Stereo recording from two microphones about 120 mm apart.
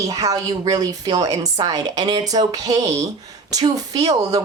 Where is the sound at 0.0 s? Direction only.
30° right (ahead or behind).